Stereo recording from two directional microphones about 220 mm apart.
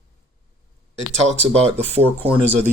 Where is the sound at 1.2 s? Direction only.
30° right (ahead or behind).